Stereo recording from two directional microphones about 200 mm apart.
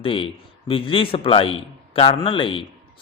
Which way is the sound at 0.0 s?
25° left (ahead or behind).